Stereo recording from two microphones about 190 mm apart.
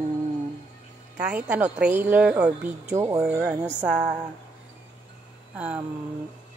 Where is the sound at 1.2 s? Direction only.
5° right (ahead or behind).